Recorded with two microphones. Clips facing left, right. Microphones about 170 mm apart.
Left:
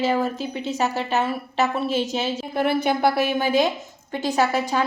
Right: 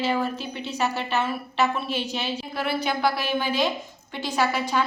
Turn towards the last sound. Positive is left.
turn(degrees=45)  # may be behind; listen again after turning